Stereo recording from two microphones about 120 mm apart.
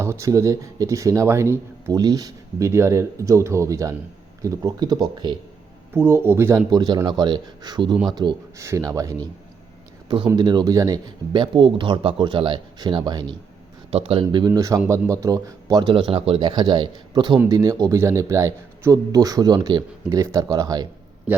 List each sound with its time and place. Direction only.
0.0 s speech: 25° right (ahead or behind)
2.0 s speech: 35° right (ahead or behind)
5.9 s speech: 20° right (ahead or behind)
6.7 s speech: 35° right (ahead or behind)
8.5 s speech: 25° right (ahead or behind)
10.3 s speech: 35° right (ahead or behind)
13.9 s a man's voice: 50° right (ahead or behind)
14.4 s speech: 30° right (ahead or behind)
15.8 s a man's voice: 45° right (ahead or behind)
16.5 s speech: 35° right (ahead or behind)
20.1 s speech: 25° right (ahead or behind)
21.3 s a man's voice: 15° right (ahead or behind)